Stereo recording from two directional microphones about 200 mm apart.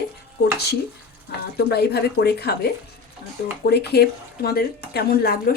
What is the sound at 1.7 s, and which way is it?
Speech, 55° left (ahead or behind).